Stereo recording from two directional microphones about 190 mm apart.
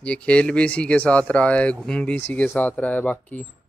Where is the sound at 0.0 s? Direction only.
5° left (ahead or behind).